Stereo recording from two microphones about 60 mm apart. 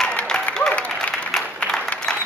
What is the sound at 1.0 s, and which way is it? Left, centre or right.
Applause, centre.